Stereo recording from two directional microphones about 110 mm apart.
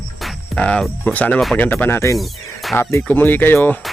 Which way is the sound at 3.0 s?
15° left (ahead or behind).